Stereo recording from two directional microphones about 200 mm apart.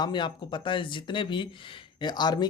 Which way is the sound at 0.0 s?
25° left (ahead or behind).